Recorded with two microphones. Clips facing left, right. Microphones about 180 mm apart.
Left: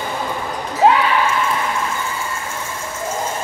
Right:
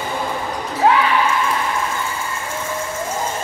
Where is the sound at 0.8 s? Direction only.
20° left (ahead or behind).